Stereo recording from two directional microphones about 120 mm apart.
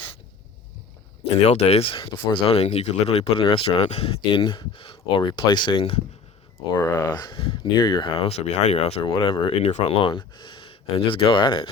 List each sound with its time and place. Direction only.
1.5 s speech: 60° left (ahead or behind)
3.3 s speech: 50° left (ahead or behind)
6.7 s speech: 25° left (ahead or behind); by 9.6 s 45° left (ahead or behind)
9.6 s speech: 65° left (ahead or behind)
10.1 s speech: 40° left (ahead or behind)